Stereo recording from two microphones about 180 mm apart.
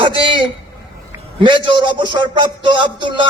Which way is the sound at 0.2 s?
25° right (ahead or behind).